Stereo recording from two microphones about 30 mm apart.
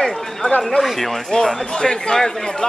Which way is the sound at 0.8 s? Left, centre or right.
Centre.